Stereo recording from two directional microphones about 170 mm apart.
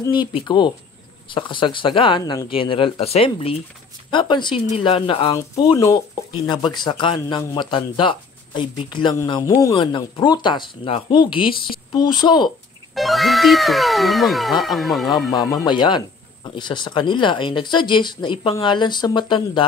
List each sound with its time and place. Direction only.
0.0 s speech: 25° left (ahead or behind)
12.9 s speech: centre (ahead or behind)
15.3 s speech: 25° left (ahead or behind)